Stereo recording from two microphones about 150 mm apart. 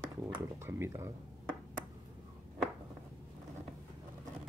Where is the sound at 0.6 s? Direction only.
20° right (ahead or behind).